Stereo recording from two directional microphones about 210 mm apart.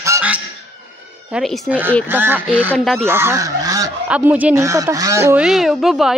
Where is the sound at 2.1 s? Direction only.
10° right (ahead or behind).